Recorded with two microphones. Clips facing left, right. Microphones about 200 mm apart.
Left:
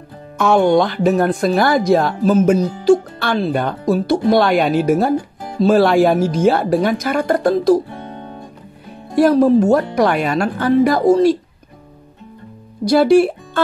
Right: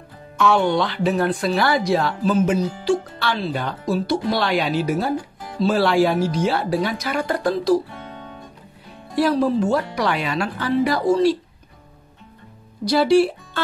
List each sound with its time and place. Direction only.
0.4 s speech: 45° left (ahead or behind)
12.8 s speech: 50° left (ahead or behind)